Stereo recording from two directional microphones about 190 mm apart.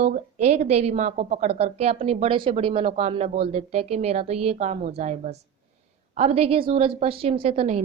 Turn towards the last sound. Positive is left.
turn(degrees=-35)  # may be behind; listen again after turning